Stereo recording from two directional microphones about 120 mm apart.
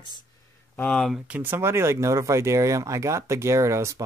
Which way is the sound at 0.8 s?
10° left (ahead or behind).